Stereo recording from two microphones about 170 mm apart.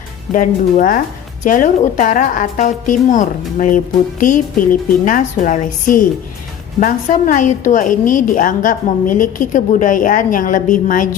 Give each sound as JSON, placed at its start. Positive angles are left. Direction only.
{"t": 0.3, "sound": "a woman's voice", "side_deg": 50}